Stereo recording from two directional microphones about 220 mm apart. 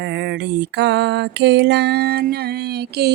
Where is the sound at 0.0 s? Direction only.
50° right (ahead or behind).